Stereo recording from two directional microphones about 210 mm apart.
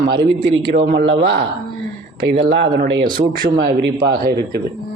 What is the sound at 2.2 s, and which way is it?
A man's voice, 50° right (ahead or behind).